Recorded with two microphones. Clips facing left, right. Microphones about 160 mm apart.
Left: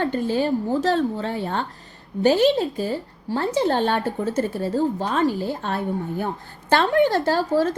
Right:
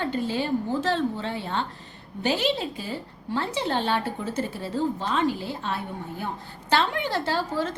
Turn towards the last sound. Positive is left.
turn(degrees=45)  # may be behind; listen again after turning